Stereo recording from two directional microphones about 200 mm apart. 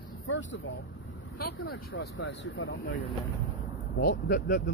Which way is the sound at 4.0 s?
50° left (ahead or behind).